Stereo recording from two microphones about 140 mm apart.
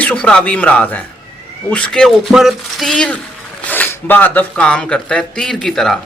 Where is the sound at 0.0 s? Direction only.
10° left (ahead or behind).